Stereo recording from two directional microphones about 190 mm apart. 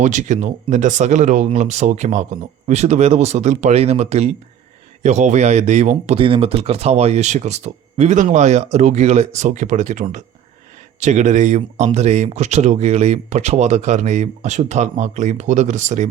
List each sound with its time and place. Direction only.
0.0 s speech: 40° right (ahead or behind)